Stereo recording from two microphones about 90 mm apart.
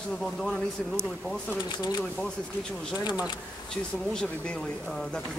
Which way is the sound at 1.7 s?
50° left (ahead or behind).